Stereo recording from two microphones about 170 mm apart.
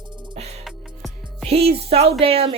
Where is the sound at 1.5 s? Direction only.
35° right (ahead or behind).